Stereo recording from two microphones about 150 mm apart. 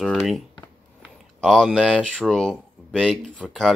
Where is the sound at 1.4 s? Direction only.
5° left (ahead or behind).